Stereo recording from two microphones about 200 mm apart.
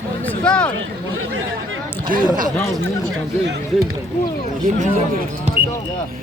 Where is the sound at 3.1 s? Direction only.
85° right.